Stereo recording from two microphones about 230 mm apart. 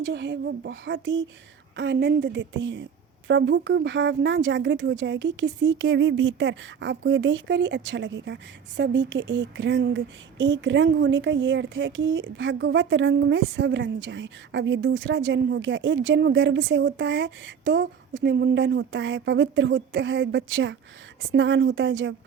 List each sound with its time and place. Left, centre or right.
0.0 s speech: right